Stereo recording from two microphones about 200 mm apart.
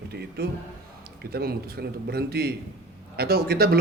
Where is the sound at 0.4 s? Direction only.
55° right (ahead or behind).